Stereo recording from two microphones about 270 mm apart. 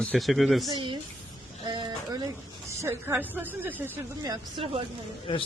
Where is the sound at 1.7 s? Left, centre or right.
Centre.